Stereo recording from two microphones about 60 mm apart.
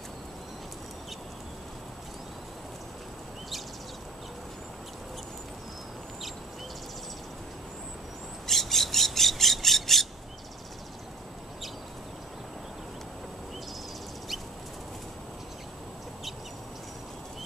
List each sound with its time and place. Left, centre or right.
8.5 s squawk: centre